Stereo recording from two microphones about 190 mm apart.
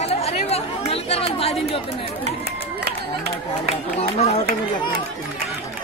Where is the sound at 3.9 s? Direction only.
35° left (ahead or behind).